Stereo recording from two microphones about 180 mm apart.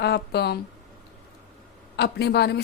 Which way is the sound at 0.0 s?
65° left (ahead or behind).